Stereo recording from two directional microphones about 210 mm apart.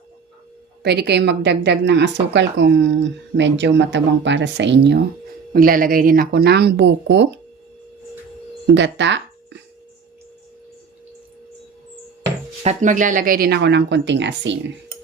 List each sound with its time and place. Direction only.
0.8 s a woman's voice: 50° right (ahead or behind)
5.5 s speech: 40° right (ahead or behind)
8.6 s speech: 60° right (ahead or behind)
12.6 s speech: 35° right (ahead or behind); by 14.6 s 60° right (ahead or behind)